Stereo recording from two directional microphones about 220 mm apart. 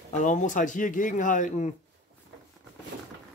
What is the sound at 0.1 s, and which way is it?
Speech, 35° left (ahead or behind).